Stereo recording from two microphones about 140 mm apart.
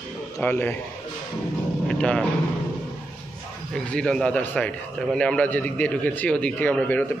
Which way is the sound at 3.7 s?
5° left (ahead or behind).